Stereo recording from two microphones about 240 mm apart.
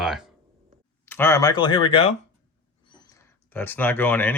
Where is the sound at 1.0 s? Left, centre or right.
Centre.